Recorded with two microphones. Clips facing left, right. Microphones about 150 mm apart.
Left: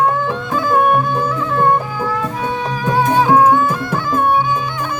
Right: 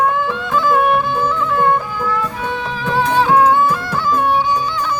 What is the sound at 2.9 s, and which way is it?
Music, 15° left (ahead or behind).